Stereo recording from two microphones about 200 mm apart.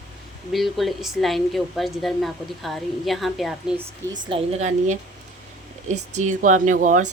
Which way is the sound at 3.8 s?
40° right (ahead or behind).